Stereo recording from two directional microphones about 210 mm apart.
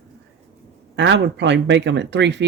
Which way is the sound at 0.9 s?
55° right (ahead or behind).